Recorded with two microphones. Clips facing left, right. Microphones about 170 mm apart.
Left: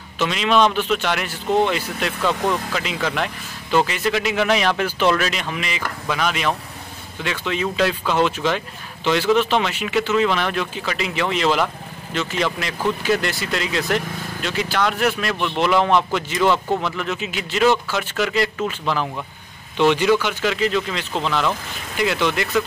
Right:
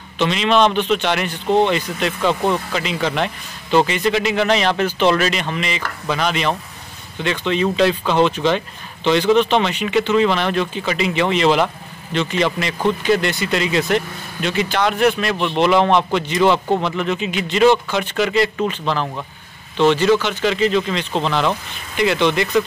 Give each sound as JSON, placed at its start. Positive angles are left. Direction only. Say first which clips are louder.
{"t": 0.2, "sound": "speech", "louder": "right 2 dB", "side_deg": 5}
{"t": 16.5, "sound": "speech", "louder": "right 3 dB", "side_deg": -20}
{"t": 16.8, "sound": "speech", "louder": "right 4 dB", "side_deg": 0}
{"t": 21.1, "sound": "speech", "louder": "right 2 dB", "side_deg": -25}
{"t": 21.9, "sound": "speech", "louder": "right 4 dB", "side_deg": 0}